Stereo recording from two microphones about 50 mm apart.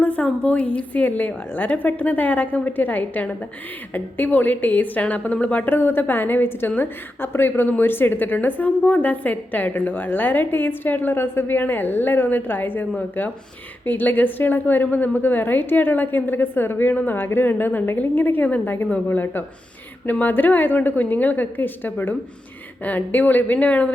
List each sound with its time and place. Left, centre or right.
0.4 s a woman's voice: left
5.7 s a woman's voice: left